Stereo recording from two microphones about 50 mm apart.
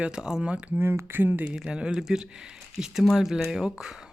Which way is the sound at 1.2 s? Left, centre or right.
Right.